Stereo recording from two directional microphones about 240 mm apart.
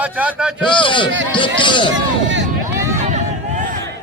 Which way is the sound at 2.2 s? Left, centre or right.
Right.